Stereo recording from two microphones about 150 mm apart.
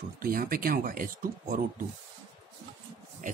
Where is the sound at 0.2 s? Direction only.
75° right (ahead or behind).